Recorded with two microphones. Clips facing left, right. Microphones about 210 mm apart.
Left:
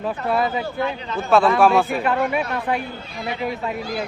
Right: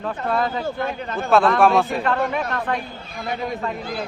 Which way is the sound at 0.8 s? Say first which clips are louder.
Left 1 dB; 50° right (ahead or behind).